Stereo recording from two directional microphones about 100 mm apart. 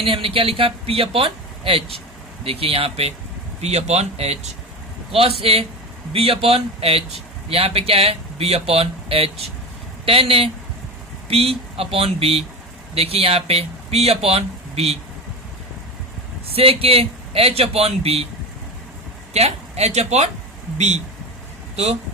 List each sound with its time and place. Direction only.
0.0 s a man's voice: 65° right (ahead or behind); by 4.4 s 90° right
5.1 s a man's voice: 70° right (ahead or behind); by 14.9 s 90° right
16.5 s a man's voice: 75° right (ahead or behind)
19.3 s speech: 90° right